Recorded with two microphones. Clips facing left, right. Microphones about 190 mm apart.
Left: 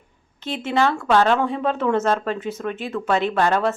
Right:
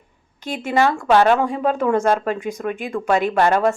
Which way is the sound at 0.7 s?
10° right (ahead or behind).